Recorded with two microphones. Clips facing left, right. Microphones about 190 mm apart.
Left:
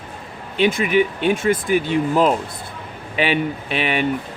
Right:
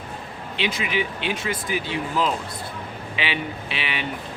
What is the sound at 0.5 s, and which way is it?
Speech, 50° left (ahead or behind).